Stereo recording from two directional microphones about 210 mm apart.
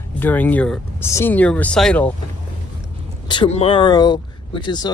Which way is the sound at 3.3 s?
25° left (ahead or behind).